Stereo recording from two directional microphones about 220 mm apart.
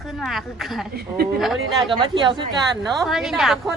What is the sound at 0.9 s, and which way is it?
Speech, 45° right (ahead or behind).